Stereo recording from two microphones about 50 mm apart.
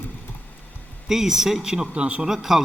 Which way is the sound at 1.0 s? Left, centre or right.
Centre.